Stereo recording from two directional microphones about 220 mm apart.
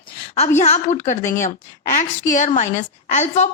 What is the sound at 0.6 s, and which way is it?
A woman's voice, 30° left (ahead or behind).